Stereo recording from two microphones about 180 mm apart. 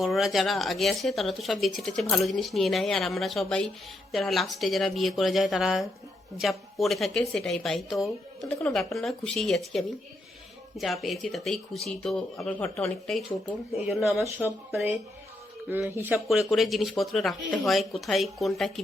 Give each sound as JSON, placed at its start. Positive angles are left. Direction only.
{"t": 0.0, "sound": "speech", "side_deg": 0}